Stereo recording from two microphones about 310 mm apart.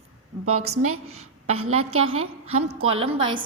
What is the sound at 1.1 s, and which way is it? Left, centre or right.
A woman's voice, right.